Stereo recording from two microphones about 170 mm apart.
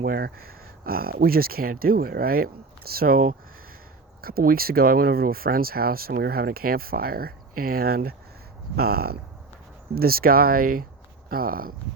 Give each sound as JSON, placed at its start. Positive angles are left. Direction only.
{"t": 0.0, "sound": "speech", "side_deg": -60}